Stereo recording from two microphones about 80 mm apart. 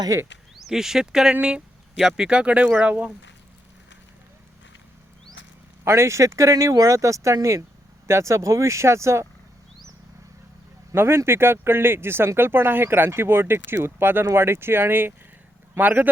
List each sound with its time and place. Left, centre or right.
0.5 s speech: centre
5.8 s speech: right
10.9 s speech: right